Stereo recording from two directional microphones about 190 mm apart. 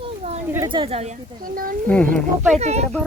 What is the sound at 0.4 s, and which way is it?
Speech, 15° right (ahead or behind).